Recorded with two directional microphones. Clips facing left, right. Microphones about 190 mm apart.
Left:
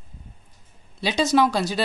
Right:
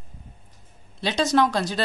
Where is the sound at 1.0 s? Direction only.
5° left (ahead or behind).